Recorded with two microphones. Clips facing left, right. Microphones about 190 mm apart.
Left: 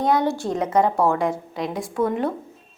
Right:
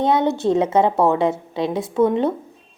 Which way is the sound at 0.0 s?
25° right (ahead or behind).